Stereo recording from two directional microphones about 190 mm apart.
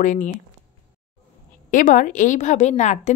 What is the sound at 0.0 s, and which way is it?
Speech, 40° left (ahead or behind).